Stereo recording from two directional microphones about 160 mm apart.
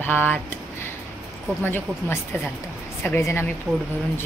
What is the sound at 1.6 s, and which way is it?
A woman's voice, 15° left (ahead or behind).